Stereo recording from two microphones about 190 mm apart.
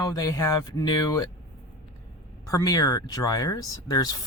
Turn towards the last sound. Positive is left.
turn(degrees=20)  # may be behind; listen again after turning